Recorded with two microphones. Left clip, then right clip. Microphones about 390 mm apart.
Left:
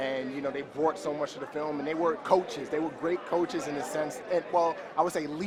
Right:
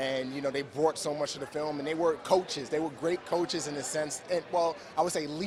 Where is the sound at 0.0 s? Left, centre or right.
Right.